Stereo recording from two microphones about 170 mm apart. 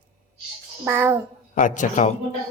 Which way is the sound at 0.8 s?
10° right (ahead or behind).